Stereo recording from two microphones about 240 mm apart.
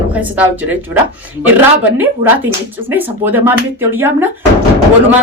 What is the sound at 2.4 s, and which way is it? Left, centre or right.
Speech, centre.